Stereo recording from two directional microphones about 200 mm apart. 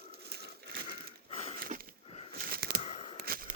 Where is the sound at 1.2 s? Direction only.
30° left (ahead or behind).